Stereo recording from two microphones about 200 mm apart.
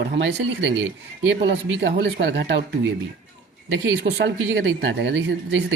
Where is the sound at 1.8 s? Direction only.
60° right (ahead or behind).